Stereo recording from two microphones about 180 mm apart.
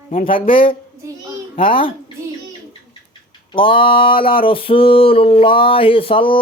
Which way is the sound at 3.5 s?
30° left (ahead or behind).